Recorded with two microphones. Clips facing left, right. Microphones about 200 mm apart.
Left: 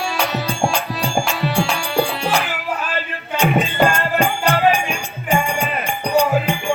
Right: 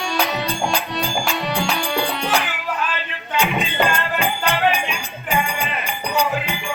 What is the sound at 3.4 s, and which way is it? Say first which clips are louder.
Music: left 5 dB; 45° left (ahead or behind).